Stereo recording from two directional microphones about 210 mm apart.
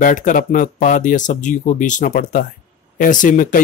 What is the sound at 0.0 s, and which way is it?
Speech, 40° left (ahead or behind).